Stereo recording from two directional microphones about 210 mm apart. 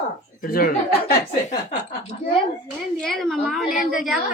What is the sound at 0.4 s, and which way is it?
Speech, 45° left (ahead or behind).